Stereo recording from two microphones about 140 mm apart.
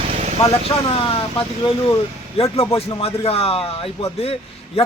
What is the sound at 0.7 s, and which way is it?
Speech, 40° left (ahead or behind).